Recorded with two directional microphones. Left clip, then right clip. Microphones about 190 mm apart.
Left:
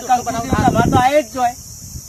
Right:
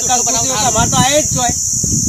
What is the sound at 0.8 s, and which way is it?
Speech, 5° right (ahead or behind).